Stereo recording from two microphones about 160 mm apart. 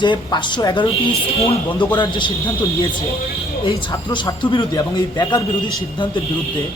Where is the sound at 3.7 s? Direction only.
30° left (ahead or behind).